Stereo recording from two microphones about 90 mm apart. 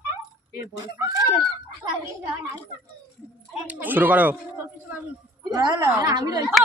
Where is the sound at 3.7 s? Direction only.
20° right (ahead or behind).